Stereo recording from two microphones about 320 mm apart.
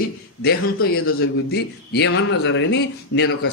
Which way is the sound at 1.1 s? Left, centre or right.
Left.